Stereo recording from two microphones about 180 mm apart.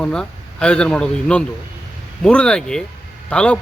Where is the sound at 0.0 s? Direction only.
5° left (ahead or behind).